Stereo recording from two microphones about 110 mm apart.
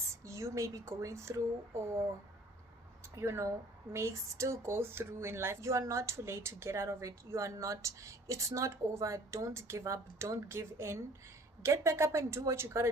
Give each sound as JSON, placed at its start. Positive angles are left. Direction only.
{"t": 0.3, "sound": "speech", "side_deg": -25}
{"t": 3.2, "sound": "speech", "side_deg": -25}